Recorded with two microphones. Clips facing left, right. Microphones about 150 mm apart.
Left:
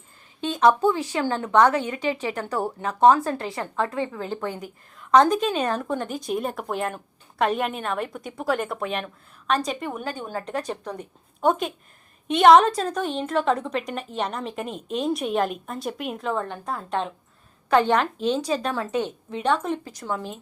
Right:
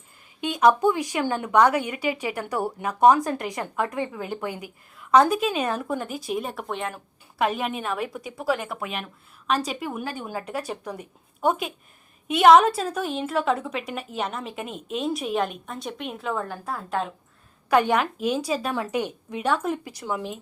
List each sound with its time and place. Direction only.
0.4 s a woman's voice: 10° right (ahead or behind)